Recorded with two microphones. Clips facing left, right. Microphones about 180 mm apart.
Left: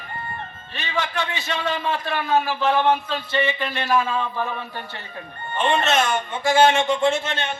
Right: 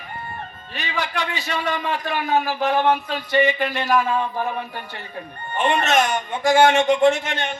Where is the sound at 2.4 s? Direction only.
45° right (ahead or behind).